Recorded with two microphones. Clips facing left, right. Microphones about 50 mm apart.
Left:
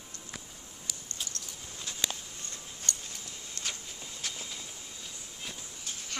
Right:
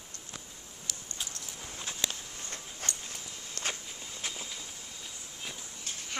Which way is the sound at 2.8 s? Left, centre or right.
Right.